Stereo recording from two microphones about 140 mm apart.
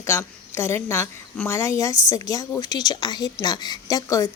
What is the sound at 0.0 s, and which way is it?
A woman's voice, 20° left (ahead or behind).